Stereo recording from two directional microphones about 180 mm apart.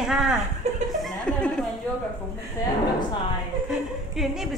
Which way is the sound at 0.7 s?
40° right (ahead or behind).